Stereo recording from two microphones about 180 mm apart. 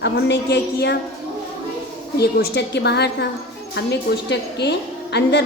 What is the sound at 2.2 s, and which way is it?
A woman's voice, 65° left (ahead or behind).